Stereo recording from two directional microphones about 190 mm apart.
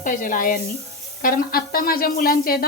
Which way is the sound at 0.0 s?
45° left (ahead or behind).